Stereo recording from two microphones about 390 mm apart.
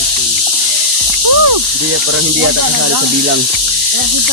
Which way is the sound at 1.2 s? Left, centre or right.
Right.